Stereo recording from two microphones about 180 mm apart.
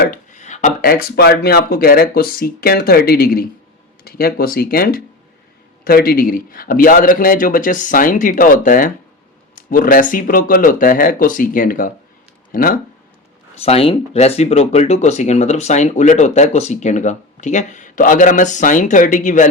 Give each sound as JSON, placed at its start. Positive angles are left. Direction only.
{"t": 0.0, "sound": "a man's voice", "side_deg": 50}
{"t": 13.6, "sound": "speech", "side_deg": 35}